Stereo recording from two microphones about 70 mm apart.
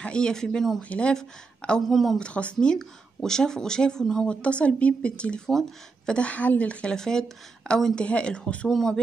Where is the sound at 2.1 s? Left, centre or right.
Centre.